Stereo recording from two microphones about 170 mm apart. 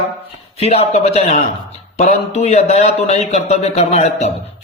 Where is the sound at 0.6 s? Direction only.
40° left (ahead or behind).